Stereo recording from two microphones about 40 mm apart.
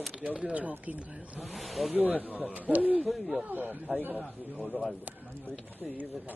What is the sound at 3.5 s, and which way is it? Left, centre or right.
Speech, right.